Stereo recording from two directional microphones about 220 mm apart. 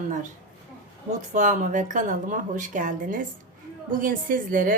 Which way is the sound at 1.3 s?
35° right (ahead or behind).